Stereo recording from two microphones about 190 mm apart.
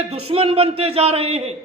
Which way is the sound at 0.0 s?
30° right (ahead or behind).